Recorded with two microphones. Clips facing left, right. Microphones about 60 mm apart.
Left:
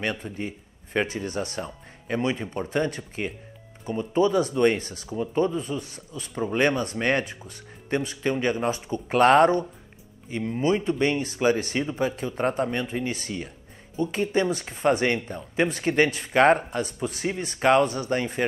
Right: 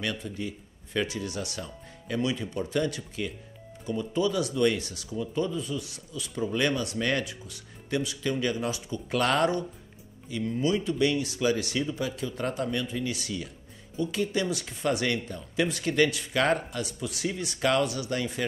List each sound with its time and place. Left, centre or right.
0.0 s speech: left